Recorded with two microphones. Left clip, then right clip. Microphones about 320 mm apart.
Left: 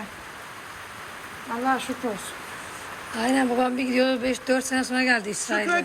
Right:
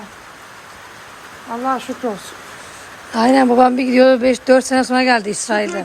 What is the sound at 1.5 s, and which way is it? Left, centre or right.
Speech, right.